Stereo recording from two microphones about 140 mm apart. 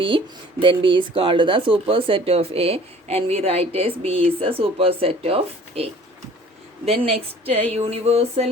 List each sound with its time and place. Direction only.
0.6 s speech: 35° right (ahead or behind)